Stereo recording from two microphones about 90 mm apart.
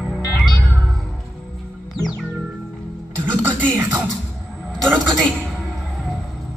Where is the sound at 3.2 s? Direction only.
20° right (ahead or behind).